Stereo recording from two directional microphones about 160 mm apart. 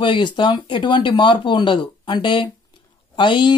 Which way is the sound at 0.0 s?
30° left (ahead or behind).